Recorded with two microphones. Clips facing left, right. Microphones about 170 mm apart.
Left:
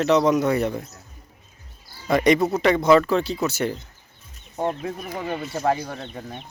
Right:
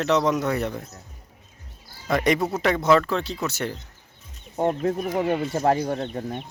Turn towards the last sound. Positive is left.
turn(degrees=-40)  # may be behind; listen again after turning